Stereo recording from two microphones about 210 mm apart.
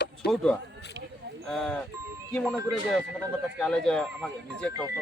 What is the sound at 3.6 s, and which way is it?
Speech, 5° left (ahead or behind).